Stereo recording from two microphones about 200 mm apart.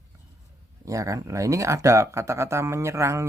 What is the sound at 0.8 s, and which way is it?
Speech, 15° right (ahead or behind).